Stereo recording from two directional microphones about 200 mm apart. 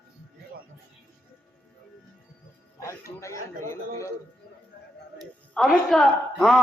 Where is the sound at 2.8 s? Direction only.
15° left (ahead or behind).